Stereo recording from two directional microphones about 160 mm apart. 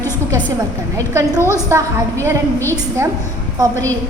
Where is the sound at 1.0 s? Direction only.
20° right (ahead or behind).